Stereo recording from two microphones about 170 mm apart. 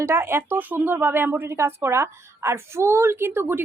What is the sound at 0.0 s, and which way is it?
A woman's voice, 15° right (ahead or behind).